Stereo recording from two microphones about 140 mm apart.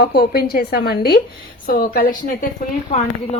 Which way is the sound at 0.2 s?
90° left.